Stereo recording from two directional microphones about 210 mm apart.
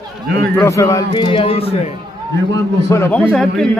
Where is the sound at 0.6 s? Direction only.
15° left (ahead or behind).